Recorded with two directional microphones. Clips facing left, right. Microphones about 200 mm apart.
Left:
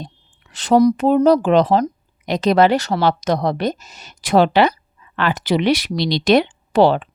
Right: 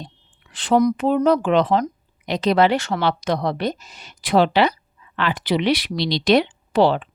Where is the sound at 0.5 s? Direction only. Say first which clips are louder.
Left 4 dB; 40° left (ahead or behind).